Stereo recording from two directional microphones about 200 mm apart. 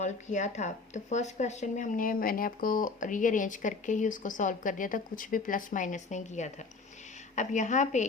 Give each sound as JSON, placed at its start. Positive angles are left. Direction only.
{"t": 0.0, "sound": "speech", "side_deg": 35}